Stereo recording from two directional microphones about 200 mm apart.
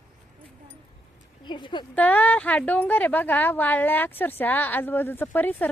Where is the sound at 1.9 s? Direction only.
10° left (ahead or behind).